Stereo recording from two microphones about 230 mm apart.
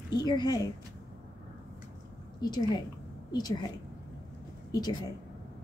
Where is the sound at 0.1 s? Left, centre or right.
Centre.